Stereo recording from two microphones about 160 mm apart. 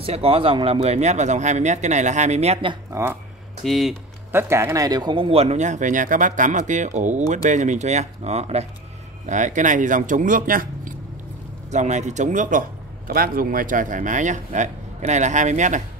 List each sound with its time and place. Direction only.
0.0 s speech: 35° right (ahead or behind)
2.9 s speech: 15° right (ahead or behind)
3.6 s speech: centre (ahead or behind)
4.3 s speech: 15° right (ahead or behind); by 11.0 s 60° right (ahead or behind)
11.7 s speech: 45° right (ahead or behind)